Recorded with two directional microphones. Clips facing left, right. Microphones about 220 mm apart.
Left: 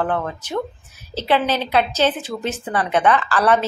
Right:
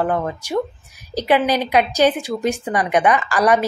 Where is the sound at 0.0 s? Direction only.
10° right (ahead or behind).